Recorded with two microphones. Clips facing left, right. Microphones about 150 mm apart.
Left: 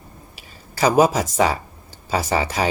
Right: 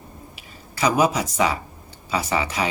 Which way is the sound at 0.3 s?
35° left (ahead or behind).